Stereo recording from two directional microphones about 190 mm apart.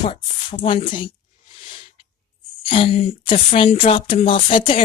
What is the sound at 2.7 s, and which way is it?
A woman's voice, 30° left (ahead or behind).